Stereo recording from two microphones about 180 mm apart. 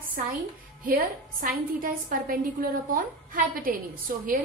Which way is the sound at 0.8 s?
55° right (ahead or behind).